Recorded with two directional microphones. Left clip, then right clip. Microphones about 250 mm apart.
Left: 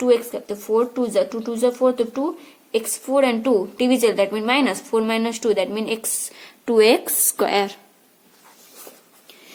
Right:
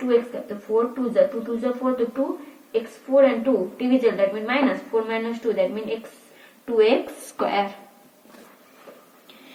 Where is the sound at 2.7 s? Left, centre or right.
Left.